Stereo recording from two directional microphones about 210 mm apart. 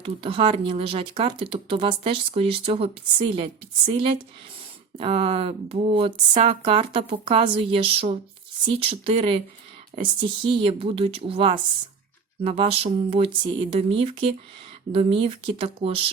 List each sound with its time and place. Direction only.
0.0 s speech: 25° right (ahead or behind)